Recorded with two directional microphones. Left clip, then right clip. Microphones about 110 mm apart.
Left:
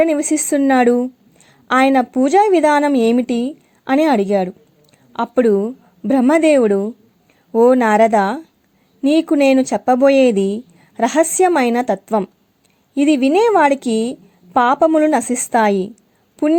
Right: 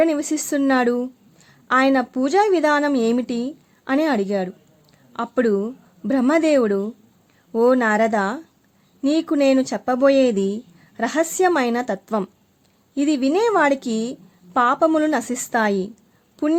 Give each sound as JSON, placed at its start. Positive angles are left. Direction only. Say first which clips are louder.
{"t": 0.0, "sound": "a woman's voice", "louder": "left 4 dB", "side_deg": 30}